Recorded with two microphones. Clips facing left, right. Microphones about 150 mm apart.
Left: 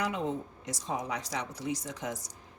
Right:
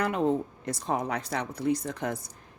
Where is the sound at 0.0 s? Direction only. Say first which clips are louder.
Right 6 dB; 55° right (ahead or behind).